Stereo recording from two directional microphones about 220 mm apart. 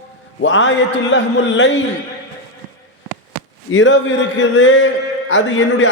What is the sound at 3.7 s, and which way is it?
A man's voice, 60° left (ahead or behind).